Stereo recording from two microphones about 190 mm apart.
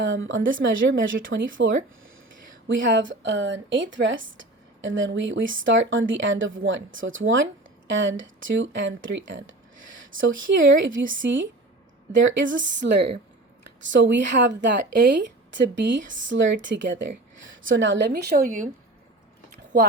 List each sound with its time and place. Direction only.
0.0 s a woman's voice: 80° right
13.8 s speech: 70° right (ahead or behind)
18.1 s a woman's voice: 55° right (ahead or behind)